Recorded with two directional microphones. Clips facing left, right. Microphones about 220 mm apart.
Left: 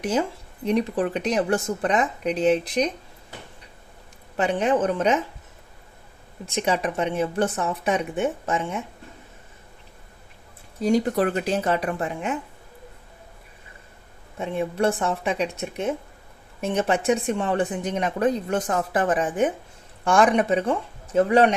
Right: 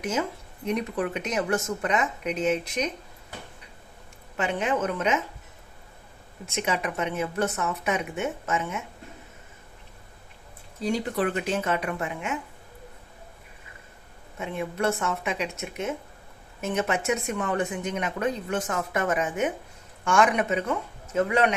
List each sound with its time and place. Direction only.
0.0 s speech: 35° left (ahead or behind)
4.4 s speech: 35° left (ahead or behind)
6.4 s speech: 35° left (ahead or behind)
10.8 s speech: 40° left (ahead or behind)
14.3 s speech: 35° left (ahead or behind)